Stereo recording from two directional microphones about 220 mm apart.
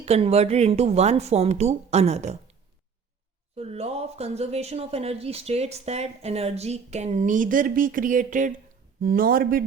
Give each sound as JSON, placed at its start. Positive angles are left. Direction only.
{"t": 0.0, "sound": "speech", "side_deg": -30}
{"t": 3.6, "sound": "speech", "side_deg": -30}